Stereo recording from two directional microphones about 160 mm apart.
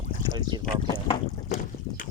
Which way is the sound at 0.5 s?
25° right (ahead or behind).